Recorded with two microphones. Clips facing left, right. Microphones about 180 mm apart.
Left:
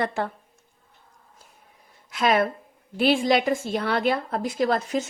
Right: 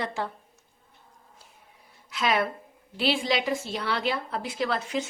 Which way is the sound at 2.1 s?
50° left (ahead or behind).